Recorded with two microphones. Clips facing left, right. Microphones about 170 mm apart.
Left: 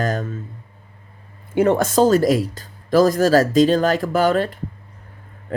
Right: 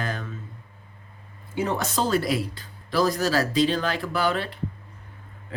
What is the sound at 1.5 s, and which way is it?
Speech, 55° left (ahead or behind).